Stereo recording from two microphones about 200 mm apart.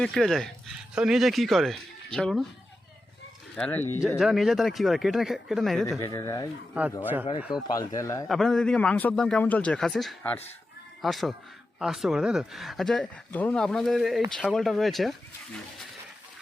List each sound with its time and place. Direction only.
0.0 s speech: centre (ahead or behind)
3.5 s speech: 10° left (ahead or behind)
4.2 s speech: centre (ahead or behind)
6.0 s speech: 15° left (ahead or behind)
6.8 s speech: 5° right (ahead or behind)
7.8 s speech: 15° left (ahead or behind)
8.3 s speech: centre (ahead or behind)